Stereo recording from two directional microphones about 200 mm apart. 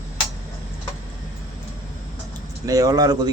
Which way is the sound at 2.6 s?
15° right (ahead or behind).